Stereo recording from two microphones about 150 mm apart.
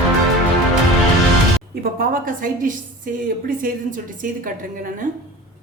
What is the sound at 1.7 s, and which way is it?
A woman's voice, 80° right.